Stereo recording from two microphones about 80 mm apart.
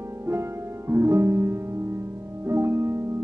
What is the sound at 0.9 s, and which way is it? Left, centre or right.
Music, right.